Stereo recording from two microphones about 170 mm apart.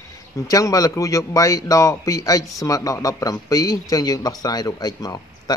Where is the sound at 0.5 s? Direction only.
20° left (ahead or behind).